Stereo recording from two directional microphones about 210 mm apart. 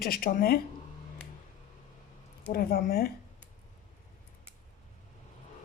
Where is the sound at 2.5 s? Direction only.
45° left (ahead or behind).